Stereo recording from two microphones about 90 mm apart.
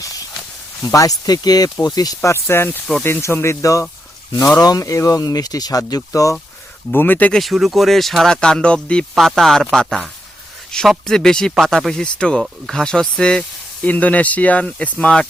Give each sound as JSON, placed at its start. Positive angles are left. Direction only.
{"t": 0.8, "sound": "speech", "side_deg": 35}
{"t": 2.3, "sound": "speech", "side_deg": 25}
{"t": 6.9, "sound": "speech", "side_deg": 20}
{"t": 7.3, "sound": "speech", "side_deg": 0}
{"t": 10.7, "sound": "a man's voice", "side_deg": 5}